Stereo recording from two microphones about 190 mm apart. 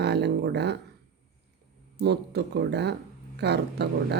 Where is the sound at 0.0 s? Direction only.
60° right (ahead or behind).